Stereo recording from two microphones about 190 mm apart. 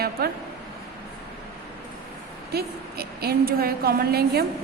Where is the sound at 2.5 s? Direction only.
55° right (ahead or behind).